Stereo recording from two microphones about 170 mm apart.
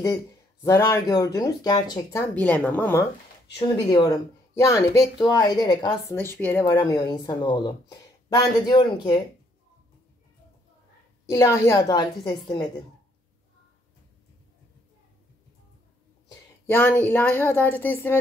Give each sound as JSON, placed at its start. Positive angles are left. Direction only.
{"t": 0.0, "sound": "speech", "side_deg": 20}
{"t": 3.5, "sound": "speech", "side_deg": 25}
{"t": 6.8, "sound": "speech", "side_deg": 25}
{"t": 11.2, "sound": "speech", "side_deg": 15}
{"t": 16.6, "sound": "speech", "side_deg": 10}